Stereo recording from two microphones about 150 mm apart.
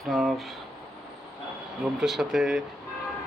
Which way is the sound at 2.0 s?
Centre (ahead or behind).